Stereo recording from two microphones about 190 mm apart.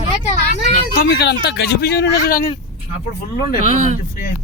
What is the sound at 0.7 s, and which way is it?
Speech, 55° left (ahead or behind).